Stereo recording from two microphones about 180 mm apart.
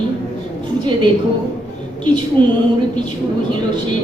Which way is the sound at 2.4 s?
25° right (ahead or behind).